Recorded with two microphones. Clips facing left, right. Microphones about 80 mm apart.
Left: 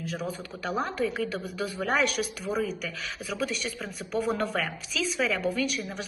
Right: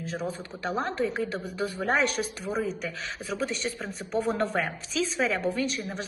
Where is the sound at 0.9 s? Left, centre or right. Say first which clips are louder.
Right 1 dB; right.